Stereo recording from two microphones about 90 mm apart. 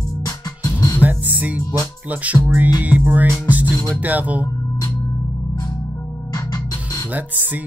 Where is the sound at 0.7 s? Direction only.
45° left (ahead or behind).